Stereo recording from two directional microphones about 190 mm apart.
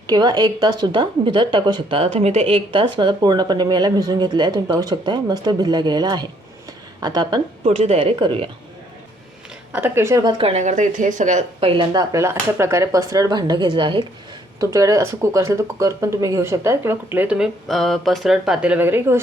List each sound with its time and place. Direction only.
0.1 s a woman's voice: 20° right (ahead or behind)
6.7 s a sound: 20° right (ahead or behind)
7.8 s a woman's voice: 30° right (ahead or behind)
9.7 s a woman's voice: 10° right (ahead or behind)